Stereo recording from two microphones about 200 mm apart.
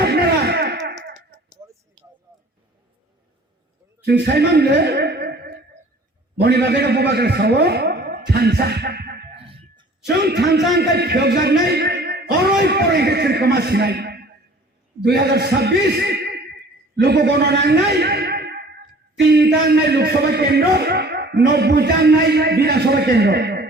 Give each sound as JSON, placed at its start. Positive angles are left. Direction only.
{"t": 0.0, "sound": "music", "side_deg": -55}
{"t": 4.0, "sound": "a woman's voice", "side_deg": -55}